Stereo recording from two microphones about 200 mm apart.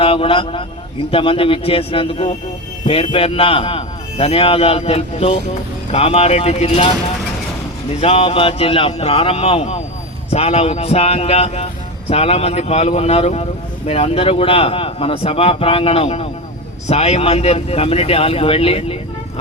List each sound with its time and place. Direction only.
0.0 s speech: 25° left (ahead or behind)
8.0 s speech: 30° left (ahead or behind)